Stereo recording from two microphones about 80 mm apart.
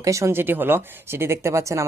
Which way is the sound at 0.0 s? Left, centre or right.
Right.